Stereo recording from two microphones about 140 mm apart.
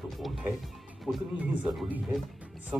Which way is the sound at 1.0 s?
5° right (ahead or behind).